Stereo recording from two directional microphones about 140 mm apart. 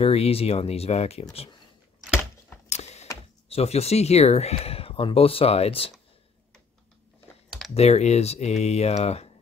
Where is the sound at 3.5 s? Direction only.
50° left (ahead or behind).